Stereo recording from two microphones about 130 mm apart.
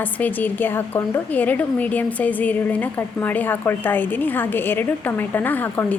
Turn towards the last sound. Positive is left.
turn(degrees=15)  # may be behind; listen again after turning